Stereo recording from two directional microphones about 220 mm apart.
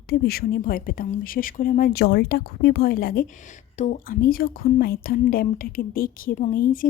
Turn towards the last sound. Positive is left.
turn(degrees=40)  # may be behind; listen again after turning